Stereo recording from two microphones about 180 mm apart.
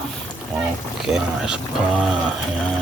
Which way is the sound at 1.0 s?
5° right (ahead or behind).